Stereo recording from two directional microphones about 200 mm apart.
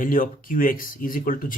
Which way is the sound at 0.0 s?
45° left (ahead or behind).